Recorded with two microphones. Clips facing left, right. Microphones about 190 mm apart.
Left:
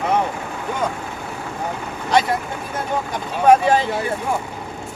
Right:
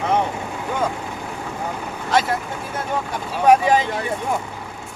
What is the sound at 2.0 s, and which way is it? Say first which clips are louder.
Speech: left 2 dB; centre (ahead or behind).